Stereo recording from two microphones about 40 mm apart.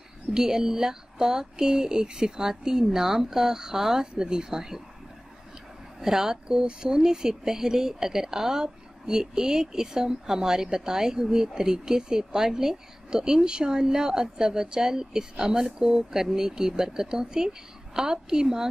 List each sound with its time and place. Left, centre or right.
0.3 s speech: centre
5.9 s speech: centre